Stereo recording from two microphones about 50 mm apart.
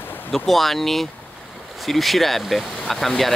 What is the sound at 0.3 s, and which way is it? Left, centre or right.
Speech, centre.